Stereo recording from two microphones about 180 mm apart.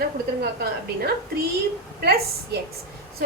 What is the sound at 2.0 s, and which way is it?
Speech, 60° right (ahead or behind).